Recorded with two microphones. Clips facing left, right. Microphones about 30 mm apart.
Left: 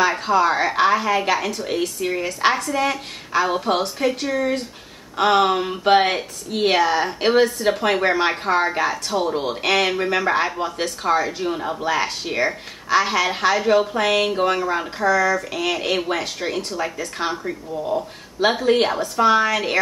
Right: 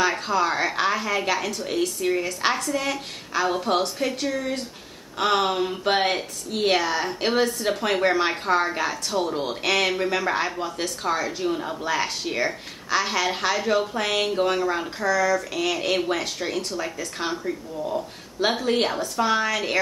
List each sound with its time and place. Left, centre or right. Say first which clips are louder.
0.0 s speech: left 5 dB; centre
17.5 s speech: left 3 dB; left
18.4 s speech: left 5 dB; centre